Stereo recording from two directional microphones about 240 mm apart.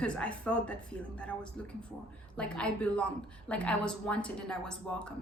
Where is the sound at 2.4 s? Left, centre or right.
Centre.